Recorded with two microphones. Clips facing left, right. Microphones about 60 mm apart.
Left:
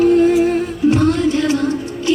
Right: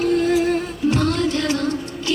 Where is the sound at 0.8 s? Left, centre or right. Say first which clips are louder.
Left 5 dB; centre.